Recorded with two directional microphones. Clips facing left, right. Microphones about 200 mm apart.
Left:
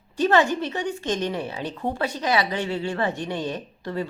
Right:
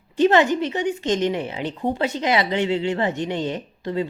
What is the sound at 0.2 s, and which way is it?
A woman's voice, 20° right (ahead or behind).